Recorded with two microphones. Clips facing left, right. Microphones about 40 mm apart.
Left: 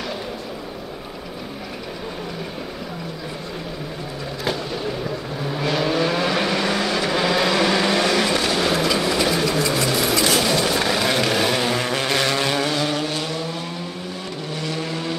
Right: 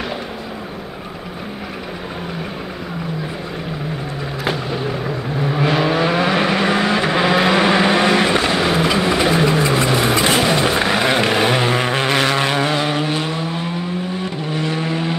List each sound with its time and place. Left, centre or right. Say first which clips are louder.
5.0 s vehicle: right 5 dB; right